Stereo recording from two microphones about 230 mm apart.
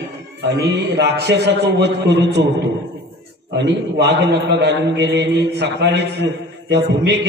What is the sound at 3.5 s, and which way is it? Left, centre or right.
A man's voice, right.